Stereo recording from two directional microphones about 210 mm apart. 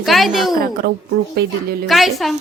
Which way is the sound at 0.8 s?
45° right (ahead or behind).